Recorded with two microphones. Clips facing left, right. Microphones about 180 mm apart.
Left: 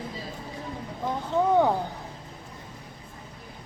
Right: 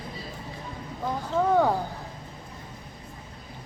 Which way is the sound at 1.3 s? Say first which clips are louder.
Left 1 dB; 20° left (ahead or behind).